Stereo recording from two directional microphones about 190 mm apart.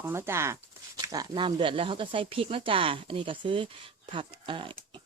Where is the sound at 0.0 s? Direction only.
15° right (ahead or behind).